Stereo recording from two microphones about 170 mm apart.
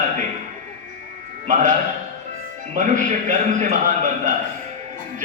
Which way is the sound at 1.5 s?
50° right (ahead or behind).